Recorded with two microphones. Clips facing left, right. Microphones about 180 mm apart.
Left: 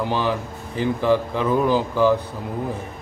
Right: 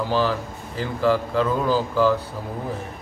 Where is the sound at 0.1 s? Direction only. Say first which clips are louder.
Right 1 dB; 20° left (ahead or behind).